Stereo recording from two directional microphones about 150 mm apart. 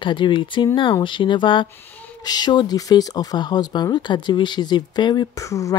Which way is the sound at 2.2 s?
25° left (ahead or behind).